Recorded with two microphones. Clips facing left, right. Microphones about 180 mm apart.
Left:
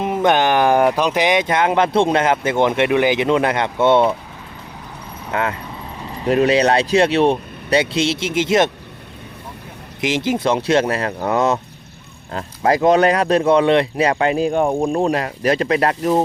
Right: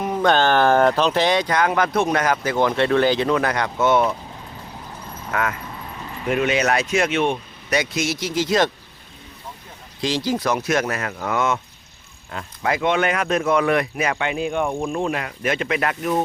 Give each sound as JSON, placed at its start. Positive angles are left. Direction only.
{"t": 0.0, "sound": "speech", "side_deg": 20}
{"t": 5.3, "sound": "speech", "side_deg": 25}
{"t": 10.0, "sound": "speech", "side_deg": 20}